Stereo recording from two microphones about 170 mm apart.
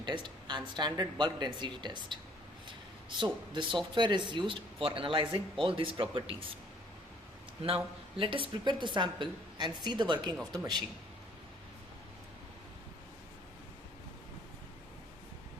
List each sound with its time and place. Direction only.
0.0 s speech: 25° right (ahead or behind)
3.2 s speech: 25° right (ahead or behind)
7.6 s a woman's voice: 35° right (ahead or behind)